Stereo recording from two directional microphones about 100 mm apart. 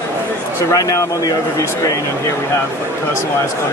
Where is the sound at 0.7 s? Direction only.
35° left (ahead or behind).